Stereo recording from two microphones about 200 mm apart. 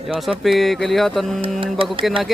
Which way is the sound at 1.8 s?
25° right (ahead or behind).